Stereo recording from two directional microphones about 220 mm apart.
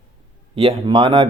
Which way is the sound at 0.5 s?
20° right (ahead or behind).